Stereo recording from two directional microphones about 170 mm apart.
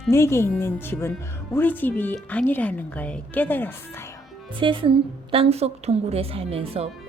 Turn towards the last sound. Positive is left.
turn(degrees=-35)  # may be behind; listen again after turning